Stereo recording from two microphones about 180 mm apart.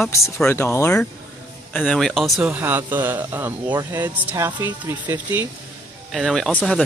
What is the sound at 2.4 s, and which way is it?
Speech, 10° right (ahead or behind).